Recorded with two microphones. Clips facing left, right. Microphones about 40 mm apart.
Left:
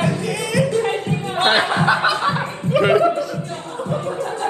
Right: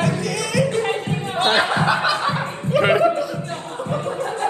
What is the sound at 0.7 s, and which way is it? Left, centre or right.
Music, right.